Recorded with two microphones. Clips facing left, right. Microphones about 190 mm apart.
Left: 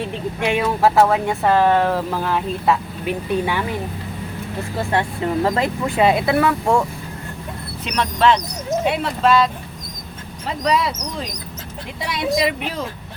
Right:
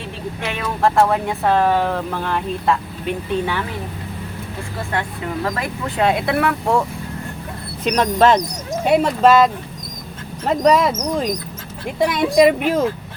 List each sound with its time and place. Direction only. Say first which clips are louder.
0.4 s speech: left 3 dB; 10° left (ahead or behind)
4.9 s speech: left 4 dB; 25° left (ahead or behind)
5.8 s speech: left 1 dB; 5° left (ahead or behind)
7.9 s speech: right 3 dB; 40° right (ahead or behind)
11.9 s speech: right 7 dB; 50° right (ahead or behind)